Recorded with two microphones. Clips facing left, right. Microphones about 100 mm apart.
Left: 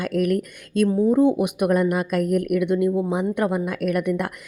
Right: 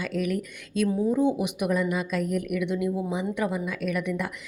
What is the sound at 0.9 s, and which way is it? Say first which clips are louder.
Speech: left 6 dB; 40° left (ahead or behind).